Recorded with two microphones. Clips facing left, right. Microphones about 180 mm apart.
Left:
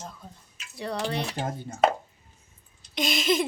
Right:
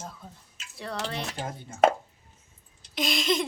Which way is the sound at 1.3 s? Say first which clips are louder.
Left 4 dB; 45° left (ahead or behind).